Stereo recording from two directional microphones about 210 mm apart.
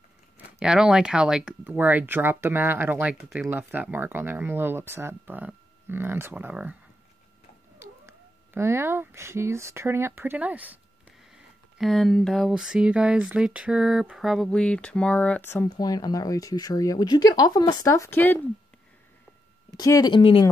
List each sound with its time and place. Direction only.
0.6 s speech: 5° right (ahead or behind)
7.8 s speech: 10° right (ahead or behind); by 18.4 s 10° left (ahead or behind)
19.8 s speech: 20° left (ahead or behind)